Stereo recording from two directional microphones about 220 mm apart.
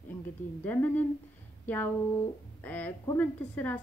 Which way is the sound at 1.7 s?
10° left (ahead or behind).